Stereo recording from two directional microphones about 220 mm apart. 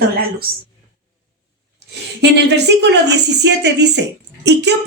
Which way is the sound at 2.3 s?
50° right (ahead or behind).